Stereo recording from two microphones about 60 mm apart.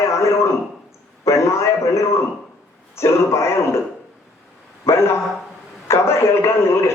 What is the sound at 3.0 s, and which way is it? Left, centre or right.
Speech, left.